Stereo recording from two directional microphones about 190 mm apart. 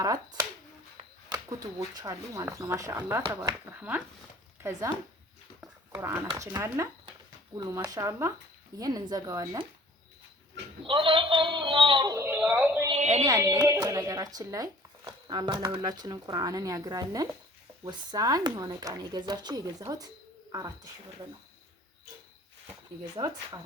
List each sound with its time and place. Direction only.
0.0 s speech: 20° right (ahead or behind)
5.5 s speech: 15° right (ahead or behind)
10.8 s speech: 25° right (ahead or behind); by 12.9 s 10° right (ahead or behind)
12.9 s speech: 35° right (ahead or behind)
13.2 s speech: 15° right (ahead or behind)
23.1 s speech: 15° right (ahead or behind)